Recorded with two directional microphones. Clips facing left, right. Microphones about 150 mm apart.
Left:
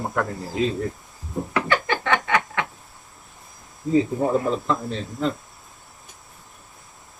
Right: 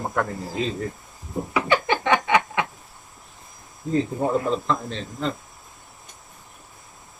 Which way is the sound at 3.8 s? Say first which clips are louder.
Left 3 dB; centre (ahead or behind).